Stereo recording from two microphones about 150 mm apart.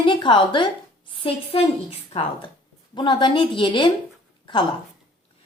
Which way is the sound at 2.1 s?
45° left (ahead or behind).